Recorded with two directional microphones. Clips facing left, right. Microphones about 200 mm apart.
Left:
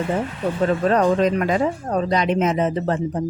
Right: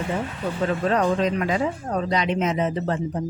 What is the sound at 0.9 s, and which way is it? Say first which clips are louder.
Speech: left 4 dB; 50° left (ahead or behind).